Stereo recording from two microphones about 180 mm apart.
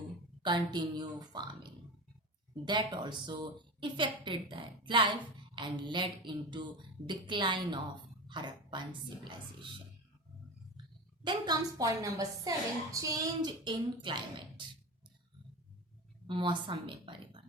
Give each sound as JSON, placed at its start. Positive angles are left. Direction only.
{"t": 0.4, "sound": "a woman's voice", "side_deg": -25}
{"t": 2.6, "sound": "a woman's voice", "side_deg": -25}
{"t": 11.2, "sound": "a woman's voice", "side_deg": -25}
{"t": 16.2, "sound": "a woman's voice", "side_deg": -25}